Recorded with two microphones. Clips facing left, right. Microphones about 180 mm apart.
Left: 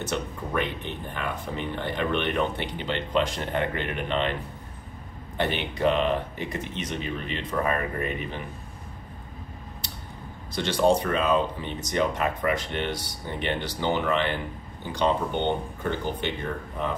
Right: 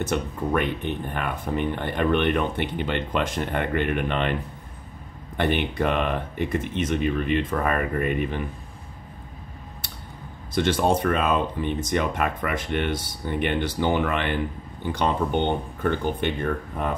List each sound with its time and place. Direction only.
0.0 s speech: 55° right (ahead or behind)
5.4 s speech: 55° right (ahead or behind)
10.5 s speech: 50° right (ahead or behind)